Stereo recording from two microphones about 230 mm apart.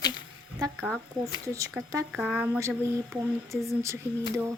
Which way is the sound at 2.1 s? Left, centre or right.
Centre.